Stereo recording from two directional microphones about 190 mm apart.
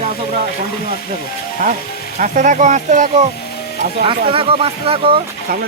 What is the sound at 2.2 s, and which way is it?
Speech, 45° right (ahead or behind).